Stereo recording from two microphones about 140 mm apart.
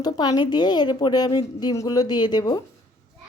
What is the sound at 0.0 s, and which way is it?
A woman's voice, 30° left (ahead or behind).